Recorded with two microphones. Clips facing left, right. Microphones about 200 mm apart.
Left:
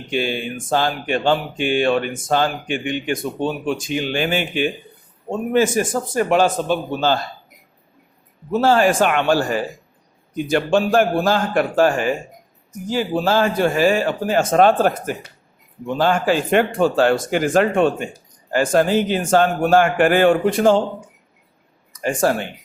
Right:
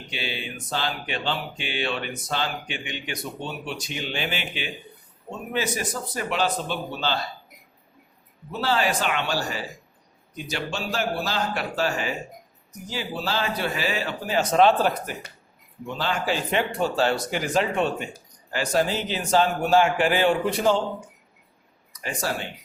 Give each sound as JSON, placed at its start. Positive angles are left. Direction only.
{"t": 0.1, "sound": "speech", "side_deg": 50}
{"t": 8.5, "sound": "speech", "side_deg": 50}
{"t": 21.9, "sound": "speech", "side_deg": 50}